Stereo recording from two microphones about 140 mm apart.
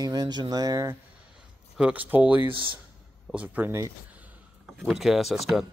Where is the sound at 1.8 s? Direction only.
10° right (ahead or behind).